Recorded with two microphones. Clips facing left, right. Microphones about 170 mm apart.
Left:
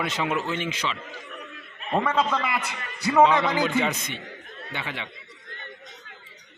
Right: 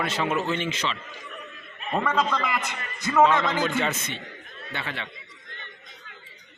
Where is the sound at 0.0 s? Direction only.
15° left (ahead or behind).